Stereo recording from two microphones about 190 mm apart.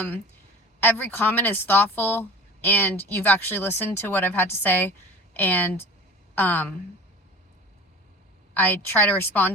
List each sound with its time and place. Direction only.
0.8 s speech: 10° left (ahead or behind)
8.5 s speech: 10° left (ahead or behind)